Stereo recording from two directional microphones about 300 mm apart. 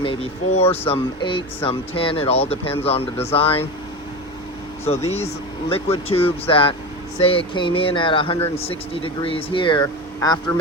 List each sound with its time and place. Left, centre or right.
0.0 s speech: centre
4.9 s speech: left